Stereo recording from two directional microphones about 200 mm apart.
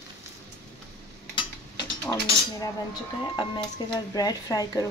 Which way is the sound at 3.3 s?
20° left (ahead or behind).